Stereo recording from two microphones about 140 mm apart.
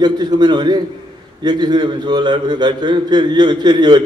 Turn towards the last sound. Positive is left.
turn(degrees=-30)  # may be behind; listen again after turning